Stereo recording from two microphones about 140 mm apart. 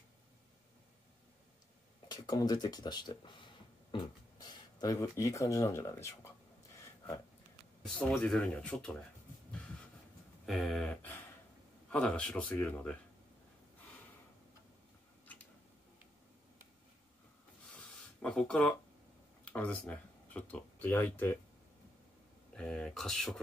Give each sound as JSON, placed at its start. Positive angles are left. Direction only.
{"t": 2.0, "sound": "speech", "side_deg": 30}
{"t": 8.2, "sound": "speech", "side_deg": 5}
{"t": 10.4, "sound": "a sound", "side_deg": 0}
{"t": 11.9, "sound": "speech", "side_deg": 10}
{"t": 18.2, "sound": "speech", "side_deg": 5}
{"t": 22.5, "sound": "speech", "side_deg": 5}